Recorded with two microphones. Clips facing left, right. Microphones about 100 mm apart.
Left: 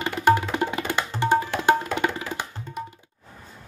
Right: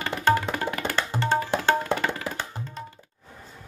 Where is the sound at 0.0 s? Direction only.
20° left (ahead or behind).